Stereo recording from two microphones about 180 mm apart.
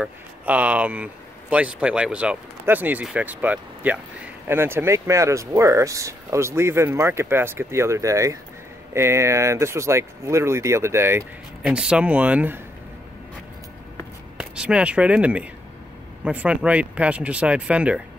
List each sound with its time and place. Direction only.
0.0 s speech: 10° right (ahead or behind)
14.4 s speech: 5° right (ahead or behind)